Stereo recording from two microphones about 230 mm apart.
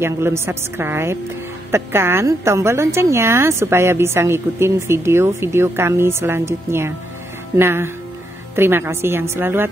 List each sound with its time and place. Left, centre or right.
0.0 s a woman's voice: centre